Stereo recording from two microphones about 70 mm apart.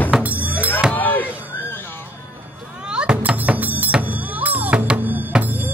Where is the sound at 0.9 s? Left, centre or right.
Left.